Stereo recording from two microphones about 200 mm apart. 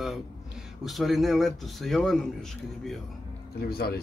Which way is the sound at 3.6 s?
50° left (ahead or behind).